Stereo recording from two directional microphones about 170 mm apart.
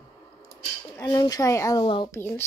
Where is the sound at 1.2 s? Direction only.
20° left (ahead or behind).